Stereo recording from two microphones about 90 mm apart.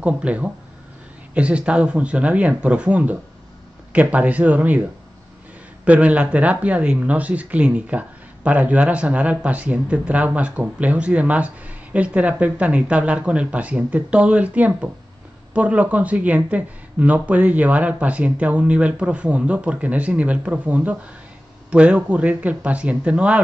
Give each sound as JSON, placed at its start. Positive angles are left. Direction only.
{"t": 0.0, "sound": "speech", "side_deg": -15}
{"t": 5.9, "sound": "speech", "side_deg": -15}